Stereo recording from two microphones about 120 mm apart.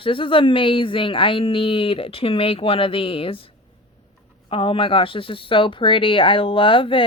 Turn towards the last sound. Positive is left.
turn(degrees=45)  # may be behind; listen again after turning